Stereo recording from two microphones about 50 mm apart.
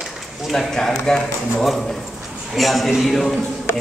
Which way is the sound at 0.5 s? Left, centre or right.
Centre.